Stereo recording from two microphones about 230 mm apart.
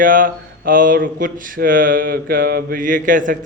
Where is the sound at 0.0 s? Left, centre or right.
Right.